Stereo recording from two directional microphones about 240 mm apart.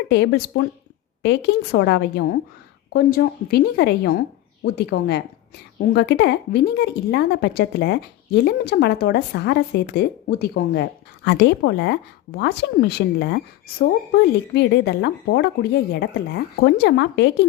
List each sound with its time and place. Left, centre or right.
0.1 s a woman's voice: left